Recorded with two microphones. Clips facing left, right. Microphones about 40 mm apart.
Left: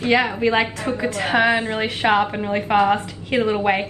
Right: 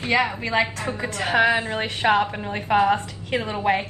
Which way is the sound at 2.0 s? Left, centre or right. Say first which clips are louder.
Left 2 dB; left.